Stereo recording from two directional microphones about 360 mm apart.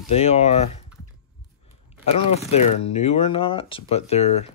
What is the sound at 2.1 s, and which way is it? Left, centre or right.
Speech, centre.